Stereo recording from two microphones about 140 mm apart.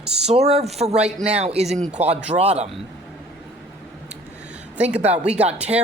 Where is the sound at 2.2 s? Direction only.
50° right (ahead or behind).